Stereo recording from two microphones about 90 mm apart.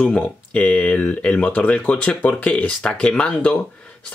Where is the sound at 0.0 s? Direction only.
10° left (ahead or behind).